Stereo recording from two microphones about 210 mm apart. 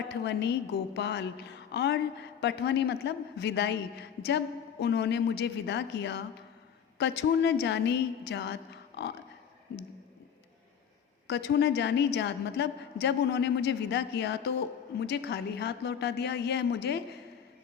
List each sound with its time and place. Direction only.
0.1 s a woman's voice: 55° left (ahead or behind)
11.3 s a woman's voice: 55° left (ahead or behind)